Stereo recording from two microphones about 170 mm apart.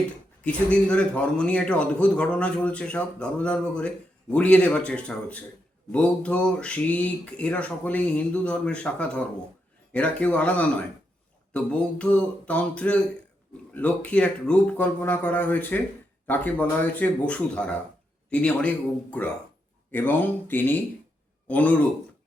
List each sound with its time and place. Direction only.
0.4 s a man's voice: 5° left (ahead or behind)